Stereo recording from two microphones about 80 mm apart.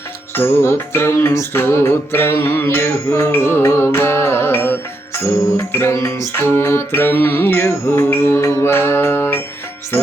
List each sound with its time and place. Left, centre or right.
0.3 s music: left
6.3 s music: left